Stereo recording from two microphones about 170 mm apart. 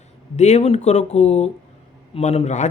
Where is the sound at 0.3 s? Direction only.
40° left (ahead or behind).